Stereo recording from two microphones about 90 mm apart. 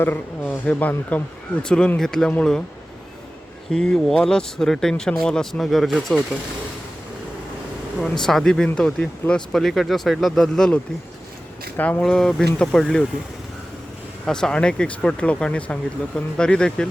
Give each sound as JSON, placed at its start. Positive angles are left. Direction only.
{"t": 0.0, "sound": "a man's voice", "side_deg": 20}
{"t": 3.7, "sound": "speech", "side_deg": 5}
{"t": 8.0, "sound": "speech", "side_deg": 5}
{"t": 11.8, "sound": "speech", "side_deg": 15}
{"t": 14.3, "sound": "speech", "side_deg": 5}